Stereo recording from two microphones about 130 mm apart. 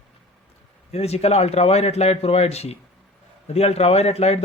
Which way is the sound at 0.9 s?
55° left (ahead or behind).